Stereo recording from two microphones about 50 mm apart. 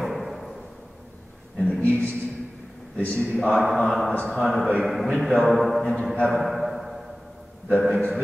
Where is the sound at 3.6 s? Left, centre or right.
Centre.